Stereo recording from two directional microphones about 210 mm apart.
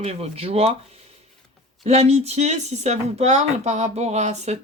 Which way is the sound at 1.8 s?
30° right (ahead or behind).